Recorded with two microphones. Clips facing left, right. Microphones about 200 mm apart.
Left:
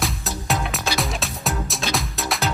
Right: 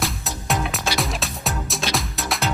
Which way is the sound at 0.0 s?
Centre (ahead or behind).